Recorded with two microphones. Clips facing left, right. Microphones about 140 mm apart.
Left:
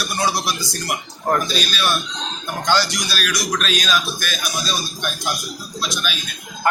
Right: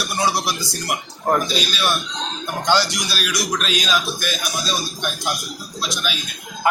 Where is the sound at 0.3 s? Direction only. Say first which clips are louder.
Even; 25° right (ahead or behind).